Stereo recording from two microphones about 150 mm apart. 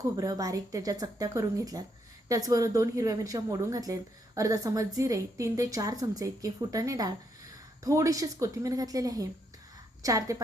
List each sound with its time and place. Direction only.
0.2 s speech: 25° right (ahead or behind)